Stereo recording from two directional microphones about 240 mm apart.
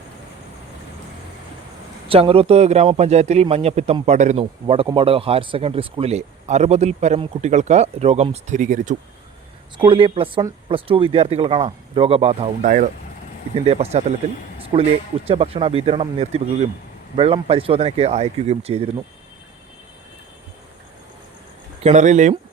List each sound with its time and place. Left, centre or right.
2.0 s a man's voice: right
9.7 s a man's voice: right
14.6 s a sound: right
15.3 s a man's voice: right
21.8 s a man's voice: right